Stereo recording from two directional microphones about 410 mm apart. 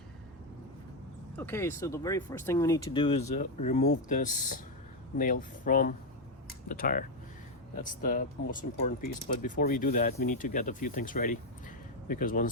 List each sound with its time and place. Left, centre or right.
1.4 s speech: centre